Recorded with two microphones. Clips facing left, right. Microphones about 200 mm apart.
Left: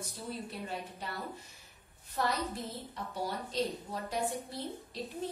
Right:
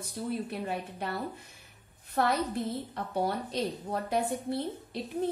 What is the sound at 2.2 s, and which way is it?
A woman's voice, 60° right (ahead or behind).